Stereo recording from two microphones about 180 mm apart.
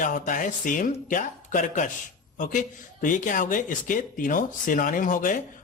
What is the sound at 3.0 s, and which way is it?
Speech, 45° left (ahead or behind).